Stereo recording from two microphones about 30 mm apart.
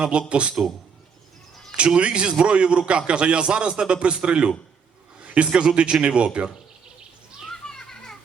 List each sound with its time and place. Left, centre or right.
0.0 s a man's voice: right
2.0 s a man's voice: right
5.2 s a sound: right
5.5 s a man's voice: right
7.8 s children playing: centre